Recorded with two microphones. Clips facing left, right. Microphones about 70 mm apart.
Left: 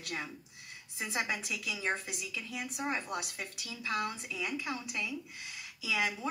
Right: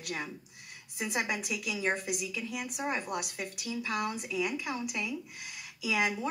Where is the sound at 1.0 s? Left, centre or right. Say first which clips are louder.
Right 2 dB; centre.